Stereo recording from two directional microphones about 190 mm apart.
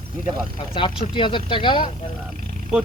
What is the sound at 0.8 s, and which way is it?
Speech, 25° left (ahead or behind).